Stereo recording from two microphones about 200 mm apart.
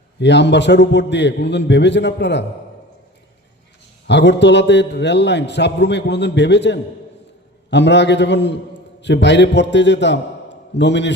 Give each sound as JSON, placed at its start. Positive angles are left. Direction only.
{"t": 0.2, "sound": "a man's voice", "side_deg": 60}
{"t": 4.0, "sound": "a man's voice", "side_deg": 60}